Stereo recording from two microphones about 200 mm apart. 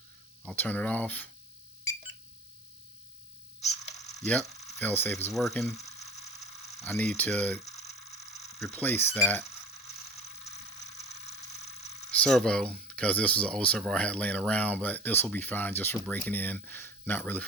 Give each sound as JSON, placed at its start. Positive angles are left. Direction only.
{"t": 0.4, "sound": "speech", "side_deg": 10}
{"t": 3.6, "sound": "mechanisms", "side_deg": 35}
{"t": 4.7, "sound": "speech", "side_deg": 10}
{"t": 6.1, "sound": "mechanisms", "side_deg": 35}
{"t": 6.7, "sound": "a sound", "side_deg": 15}
{"t": 6.9, "sound": "speech", "side_deg": 5}
{"t": 7.6, "sound": "mains hum", "side_deg": 35}
{"t": 8.6, "sound": "speech", "side_deg": 10}
{"t": 10.9, "sound": "mechanisms", "side_deg": 35}
{"t": 12.1, "sound": "speech", "side_deg": 5}